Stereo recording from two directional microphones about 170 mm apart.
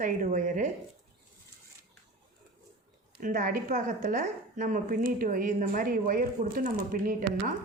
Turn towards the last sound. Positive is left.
turn(degrees=-55)  # may be behind; listen again after turning